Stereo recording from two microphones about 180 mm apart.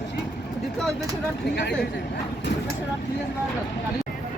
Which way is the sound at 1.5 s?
70° left (ahead or behind).